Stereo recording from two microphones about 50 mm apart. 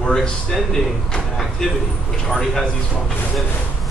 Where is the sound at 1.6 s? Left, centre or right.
Centre.